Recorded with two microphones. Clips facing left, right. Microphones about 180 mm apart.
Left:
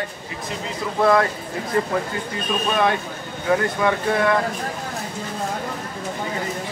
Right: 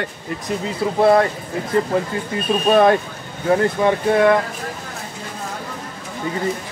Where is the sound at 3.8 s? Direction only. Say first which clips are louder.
Right 3 dB; 30° right (ahead or behind).